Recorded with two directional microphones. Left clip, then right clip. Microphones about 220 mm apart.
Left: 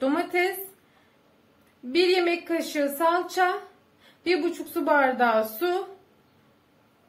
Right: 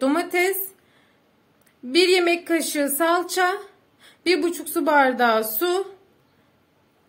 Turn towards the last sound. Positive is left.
turn(degrees=-45)  # may be behind; listen again after turning